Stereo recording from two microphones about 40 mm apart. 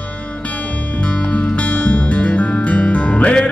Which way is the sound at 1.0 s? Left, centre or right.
Left.